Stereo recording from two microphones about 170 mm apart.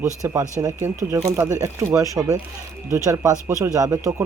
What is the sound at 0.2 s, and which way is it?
Speech, 15° right (ahead or behind).